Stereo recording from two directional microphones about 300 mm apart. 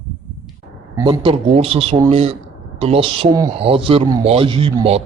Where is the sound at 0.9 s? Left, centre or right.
Centre.